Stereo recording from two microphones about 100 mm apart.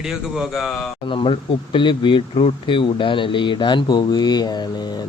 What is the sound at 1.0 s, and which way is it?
Speech, 60° left (ahead or behind).